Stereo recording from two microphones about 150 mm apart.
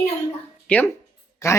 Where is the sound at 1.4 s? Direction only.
20° left (ahead or behind).